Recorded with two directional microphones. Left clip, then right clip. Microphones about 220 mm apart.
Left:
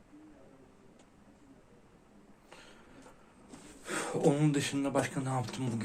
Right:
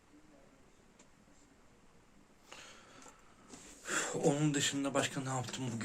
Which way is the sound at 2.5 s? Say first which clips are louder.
Right 1 dB; 25° right (ahead or behind).